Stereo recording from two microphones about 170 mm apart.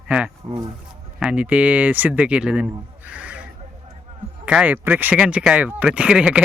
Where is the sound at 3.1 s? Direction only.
10° right (ahead or behind).